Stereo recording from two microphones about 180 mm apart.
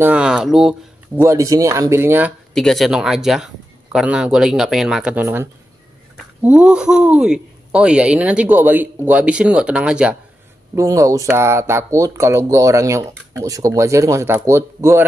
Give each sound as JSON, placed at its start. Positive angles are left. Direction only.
{"t": 0.0, "sound": "a sound", "side_deg": -5}
{"t": 1.2, "sound": "speech", "side_deg": -15}
{"t": 2.5, "sound": "speech", "side_deg": 0}
{"t": 10.7, "sound": "speech", "side_deg": -15}